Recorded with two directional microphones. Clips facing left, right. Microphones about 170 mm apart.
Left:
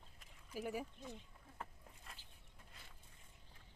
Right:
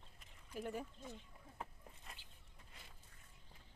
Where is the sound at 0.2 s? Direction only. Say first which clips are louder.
Left 1 dB; 5° left (ahead or behind).